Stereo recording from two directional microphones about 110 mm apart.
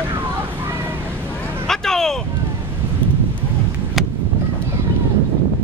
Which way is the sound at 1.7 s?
5° left (ahead or behind).